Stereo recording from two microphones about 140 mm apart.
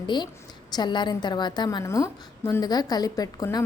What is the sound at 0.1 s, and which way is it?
A woman's voice, 35° left (ahead or behind).